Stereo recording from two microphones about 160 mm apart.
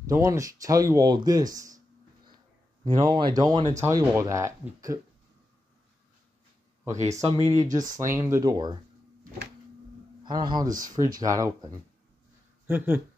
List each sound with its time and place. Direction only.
0.1 s speech: 20° right (ahead or behind)
2.8 s speech: 30° right (ahead or behind)
7.1 s speech: 20° right (ahead or behind)
10.2 s speech: 25° right (ahead or behind)
12.6 s speech: 15° right (ahead or behind)